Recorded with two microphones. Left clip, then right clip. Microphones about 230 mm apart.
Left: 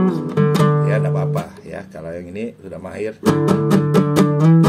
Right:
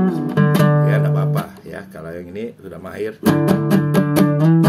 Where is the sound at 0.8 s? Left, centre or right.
Centre.